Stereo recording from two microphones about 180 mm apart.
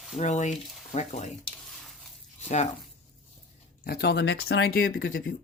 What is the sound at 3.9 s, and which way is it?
Speech, 65° left (ahead or behind).